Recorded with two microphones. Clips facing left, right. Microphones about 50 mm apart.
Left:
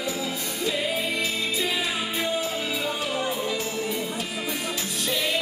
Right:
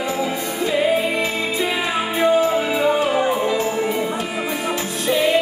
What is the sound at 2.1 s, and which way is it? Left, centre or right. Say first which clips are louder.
Music: right 15 dB; right.